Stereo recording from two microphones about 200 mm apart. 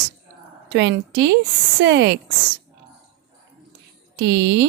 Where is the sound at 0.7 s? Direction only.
60° right (ahead or behind).